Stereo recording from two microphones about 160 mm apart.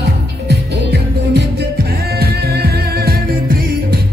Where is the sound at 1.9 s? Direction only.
75° right (ahead or behind).